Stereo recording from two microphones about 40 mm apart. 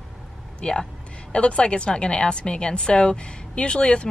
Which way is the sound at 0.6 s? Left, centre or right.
Left.